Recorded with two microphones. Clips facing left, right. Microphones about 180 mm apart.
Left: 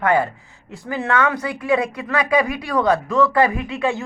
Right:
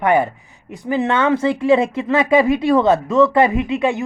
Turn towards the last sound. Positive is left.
turn(degrees=-20)  # may be behind; listen again after turning